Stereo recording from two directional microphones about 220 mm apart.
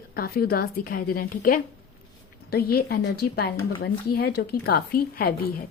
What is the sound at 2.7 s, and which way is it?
A woman's voice, 45° left (ahead or behind).